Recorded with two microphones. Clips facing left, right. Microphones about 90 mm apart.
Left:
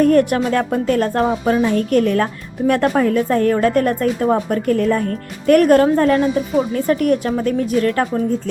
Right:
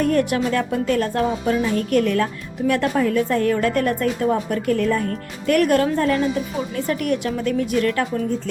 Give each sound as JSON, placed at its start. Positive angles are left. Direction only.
{"t": 0.0, "sound": "music", "side_deg": 45}
{"t": 2.6, "sound": "a woman's voice", "side_deg": 45}